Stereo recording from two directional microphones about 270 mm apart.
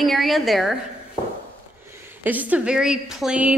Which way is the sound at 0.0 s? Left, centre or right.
Centre.